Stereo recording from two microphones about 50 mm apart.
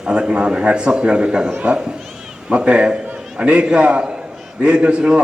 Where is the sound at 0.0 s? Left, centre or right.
Centre.